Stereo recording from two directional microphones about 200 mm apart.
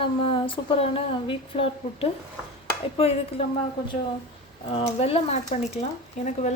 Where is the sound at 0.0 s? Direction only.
25° left (ahead or behind).